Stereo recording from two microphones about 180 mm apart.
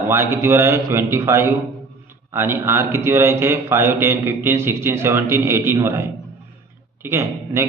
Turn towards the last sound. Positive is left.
turn(degrees=-15)  # may be behind; listen again after turning